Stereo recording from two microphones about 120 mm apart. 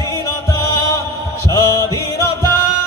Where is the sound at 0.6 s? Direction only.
25° left (ahead or behind).